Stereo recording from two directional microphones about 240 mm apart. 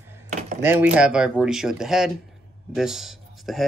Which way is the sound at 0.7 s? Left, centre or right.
Centre.